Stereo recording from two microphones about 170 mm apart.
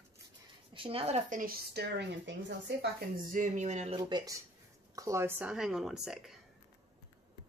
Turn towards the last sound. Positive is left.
turn(degrees=0)  # may be behind; listen again after turning